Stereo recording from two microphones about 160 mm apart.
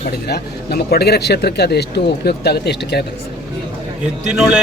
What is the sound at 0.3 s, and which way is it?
Speech, 85° left.